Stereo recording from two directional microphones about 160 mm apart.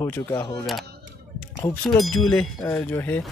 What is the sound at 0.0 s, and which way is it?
Speech, 20° left (ahead or behind).